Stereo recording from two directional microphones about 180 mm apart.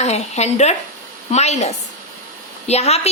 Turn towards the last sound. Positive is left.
turn(degrees=35)  # may be behind; listen again after turning